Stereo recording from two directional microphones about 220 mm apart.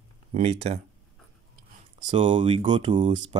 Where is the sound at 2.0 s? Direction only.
20° right (ahead or behind).